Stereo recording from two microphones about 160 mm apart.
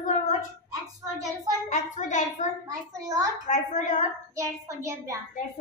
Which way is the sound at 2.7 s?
20° right (ahead or behind).